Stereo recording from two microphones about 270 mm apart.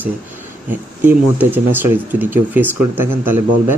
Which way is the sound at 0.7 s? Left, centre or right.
Centre.